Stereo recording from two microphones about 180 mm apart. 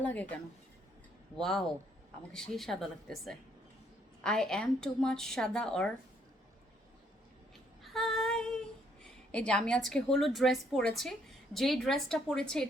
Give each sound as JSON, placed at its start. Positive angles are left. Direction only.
{"t": 0.0, "sound": "speech", "side_deg": 10}
{"t": 1.4, "sound": "speech", "side_deg": 5}
{"t": 7.9, "sound": "female singing", "side_deg": 0}
{"t": 9.5, "sound": "speech", "side_deg": 5}